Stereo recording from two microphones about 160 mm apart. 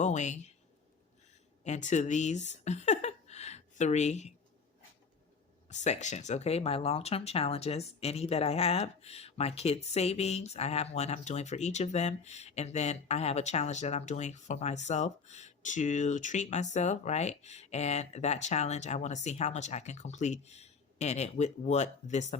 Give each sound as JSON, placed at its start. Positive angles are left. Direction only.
{"t": 0.0, "sound": "speech", "side_deg": 45}
{"t": 1.6, "sound": "a woman's voice", "side_deg": 50}
{"t": 5.6, "sound": "speech", "side_deg": 45}